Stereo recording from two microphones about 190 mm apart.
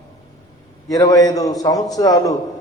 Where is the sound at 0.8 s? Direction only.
20° left (ahead or behind).